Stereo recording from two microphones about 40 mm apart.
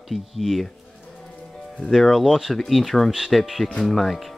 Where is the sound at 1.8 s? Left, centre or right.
Centre.